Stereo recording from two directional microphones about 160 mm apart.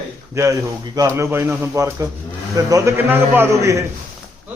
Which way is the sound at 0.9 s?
20° right (ahead or behind).